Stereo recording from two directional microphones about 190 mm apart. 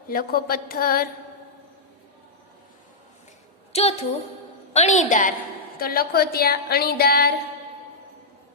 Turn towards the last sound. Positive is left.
turn(degrees=55)  # may be behind; listen again after turning